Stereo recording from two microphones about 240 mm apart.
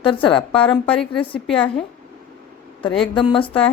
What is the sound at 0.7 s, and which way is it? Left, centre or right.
Speech, centre.